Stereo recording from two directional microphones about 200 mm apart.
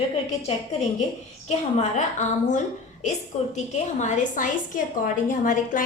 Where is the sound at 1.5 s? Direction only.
35° left (ahead or behind).